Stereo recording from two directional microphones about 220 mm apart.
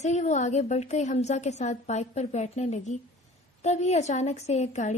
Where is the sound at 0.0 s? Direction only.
30° left (ahead or behind).